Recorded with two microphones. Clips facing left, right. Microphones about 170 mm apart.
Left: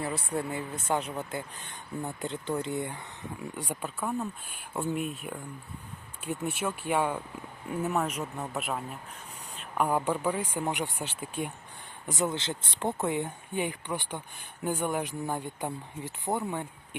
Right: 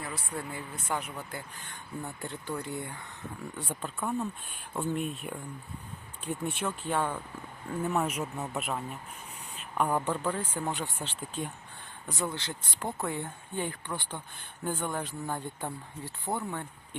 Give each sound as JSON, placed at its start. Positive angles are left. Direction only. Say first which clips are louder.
{"t": 0.3, "sound": "speech", "louder": "left 5 dB", "side_deg": 25}